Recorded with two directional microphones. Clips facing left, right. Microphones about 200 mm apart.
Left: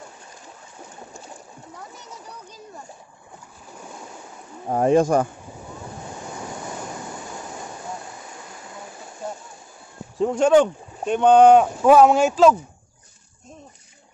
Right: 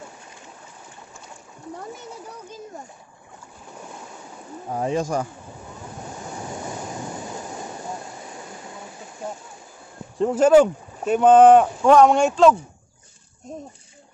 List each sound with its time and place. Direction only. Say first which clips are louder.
4.6 s speech: left 7 dB; 55° left (ahead or behind)
10.1 s speech: right 2 dB; centre (ahead or behind)